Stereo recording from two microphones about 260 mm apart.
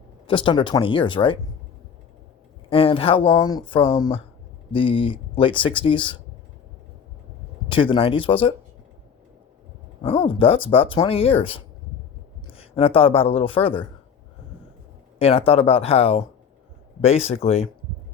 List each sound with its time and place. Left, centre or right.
0.3 s speech: centre
2.6 s speech: left
7.7 s speech: centre
10.0 s speech: left
15.2 s speech: left